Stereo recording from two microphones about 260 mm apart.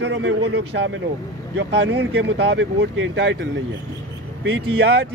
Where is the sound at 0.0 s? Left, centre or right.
Right.